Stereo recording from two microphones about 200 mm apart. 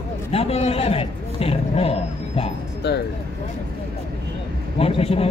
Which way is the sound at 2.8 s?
55° left (ahead or behind).